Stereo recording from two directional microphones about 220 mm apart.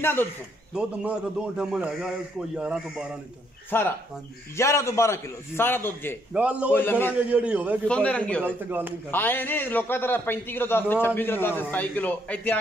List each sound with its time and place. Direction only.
0.0 s a man's voice: 10° left (ahead or behind)
0.7 s a man's voice: 5° right (ahead or behind)
3.7 s a man's voice: 10° left (ahead or behind)
6.3 s a man's voice: 5° right (ahead or behind)
6.7 s a man's voice: 10° left (ahead or behind)
7.2 s a man's voice: 5° right (ahead or behind)
7.9 s a man's voice: 5° left (ahead or behind)
8.5 s a man's voice: 10° right (ahead or behind)
9.1 s a man's voice: 10° left (ahead or behind)